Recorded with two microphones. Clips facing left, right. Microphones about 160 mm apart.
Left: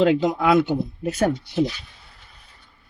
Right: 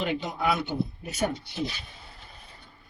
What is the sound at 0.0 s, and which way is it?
Speech, 90° left.